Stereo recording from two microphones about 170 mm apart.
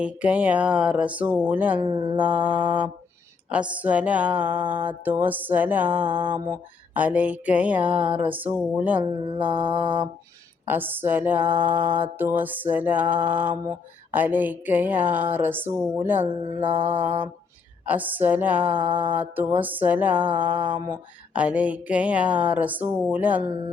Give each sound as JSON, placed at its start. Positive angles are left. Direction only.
{"t": 0.0, "sound": "speech", "side_deg": -5}
{"t": 1.8, "sound": "mantra", "side_deg": -30}
{"t": 2.1, "sound": "speech", "side_deg": -10}